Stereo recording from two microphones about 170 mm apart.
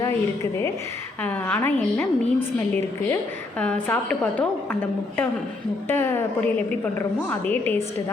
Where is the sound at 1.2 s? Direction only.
10° left (ahead or behind).